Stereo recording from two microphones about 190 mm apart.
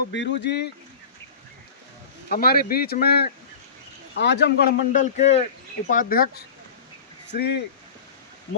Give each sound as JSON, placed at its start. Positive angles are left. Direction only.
{"t": 0.1, "sound": "speech", "side_deg": 65}
{"t": 2.3, "sound": "speech", "side_deg": 50}
{"t": 4.9, "sound": "speech", "side_deg": 40}
{"t": 5.9, "sound": "speech", "side_deg": 45}
{"t": 7.3, "sound": "speech", "side_deg": 60}